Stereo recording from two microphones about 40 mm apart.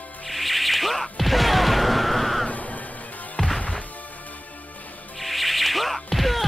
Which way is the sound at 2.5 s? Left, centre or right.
Left.